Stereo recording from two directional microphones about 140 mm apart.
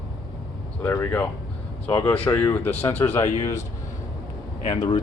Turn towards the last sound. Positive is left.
turn(degrees=30)  # may be behind; listen again after turning